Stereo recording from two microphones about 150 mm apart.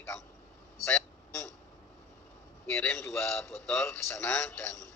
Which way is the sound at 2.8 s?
15° left (ahead or behind).